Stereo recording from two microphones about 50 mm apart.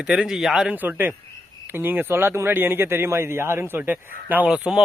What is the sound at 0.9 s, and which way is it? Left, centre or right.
Speech, right.